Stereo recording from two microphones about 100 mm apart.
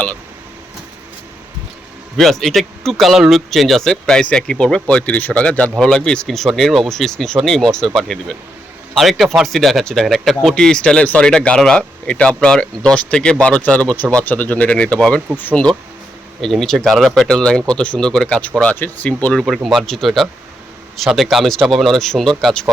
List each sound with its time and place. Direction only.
2.1 s speech: 5° left (ahead or behind); by 15.6 s 20° left (ahead or behind)
16.4 s speech: 5° left (ahead or behind)
19.6 s speech: centre (ahead or behind)